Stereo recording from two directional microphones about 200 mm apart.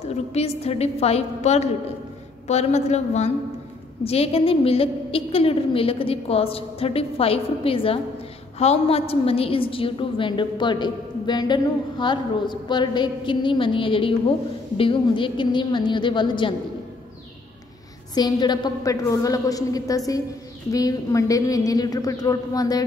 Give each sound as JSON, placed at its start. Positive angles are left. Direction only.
{"t": 0.1, "sound": "a woman's voice", "side_deg": 30}
{"t": 18.1, "sound": "a woman's voice", "side_deg": 20}